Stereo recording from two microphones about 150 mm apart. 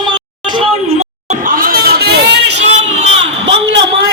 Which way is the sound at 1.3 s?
65° right (ahead or behind).